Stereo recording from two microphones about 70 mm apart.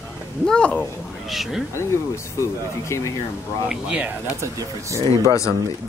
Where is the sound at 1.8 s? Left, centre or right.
Left.